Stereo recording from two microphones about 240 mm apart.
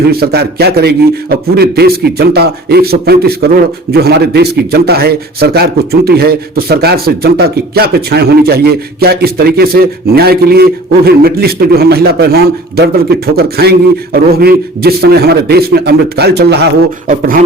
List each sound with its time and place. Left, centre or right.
0.1 s a man's voice: right